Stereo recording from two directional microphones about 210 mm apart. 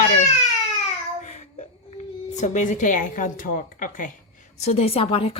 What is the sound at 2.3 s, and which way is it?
Speech, 35° left (ahead or behind).